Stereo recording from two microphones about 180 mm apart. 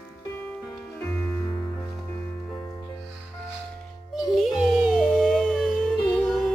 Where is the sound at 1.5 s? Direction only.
20° left (ahead or behind).